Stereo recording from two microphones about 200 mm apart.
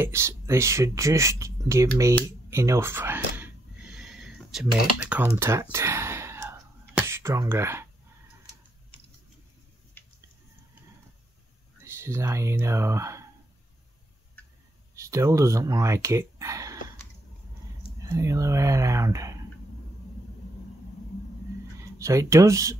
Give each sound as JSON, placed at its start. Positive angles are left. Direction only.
{"t": 0.0, "sound": "speech", "side_deg": -15}
{"t": 2.5, "sound": "a sound", "side_deg": -15}
{"t": 5.1, "sound": "whispering", "side_deg": -10}
{"t": 11.8, "sound": "speech", "side_deg": -15}
{"t": 15.0, "sound": "speech", "side_deg": -15}
{"t": 18.0, "sound": "speech", "side_deg": -15}
{"t": 21.9, "sound": "speech", "side_deg": -15}